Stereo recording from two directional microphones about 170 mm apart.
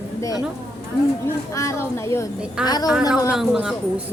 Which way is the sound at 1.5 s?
20° left (ahead or behind).